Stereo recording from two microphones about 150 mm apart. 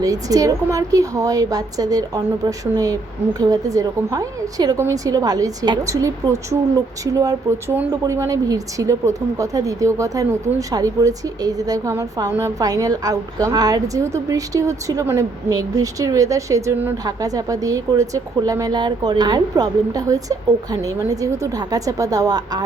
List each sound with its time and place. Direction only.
0.0 s a woman's voice: 25° right (ahead or behind)